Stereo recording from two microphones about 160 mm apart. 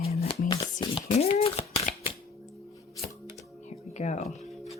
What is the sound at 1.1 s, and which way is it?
Shuffling cards, 40° left (ahead or behind).